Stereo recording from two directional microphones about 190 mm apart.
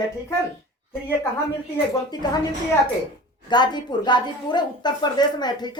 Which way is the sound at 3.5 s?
25° left (ahead or behind).